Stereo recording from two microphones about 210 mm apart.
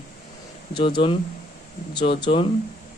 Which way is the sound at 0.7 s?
20° left (ahead or behind).